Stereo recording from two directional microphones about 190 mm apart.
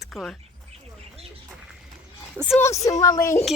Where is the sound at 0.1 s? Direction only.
5° left (ahead or behind).